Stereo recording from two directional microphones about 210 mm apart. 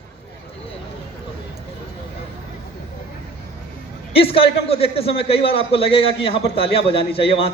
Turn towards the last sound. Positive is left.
turn(degrees=25)  # may be behind; listen again after turning